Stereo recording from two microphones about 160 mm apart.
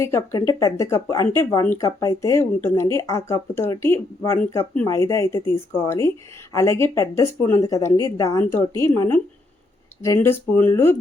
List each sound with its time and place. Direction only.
0.0 s speech: 15° left (ahead or behind)
6.5 s speech: 20° left (ahead or behind)